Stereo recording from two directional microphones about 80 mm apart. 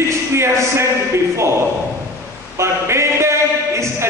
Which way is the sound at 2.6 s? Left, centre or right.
Right.